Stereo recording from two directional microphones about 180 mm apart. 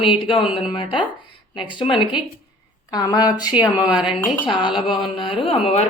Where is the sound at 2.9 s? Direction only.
20° left (ahead or behind).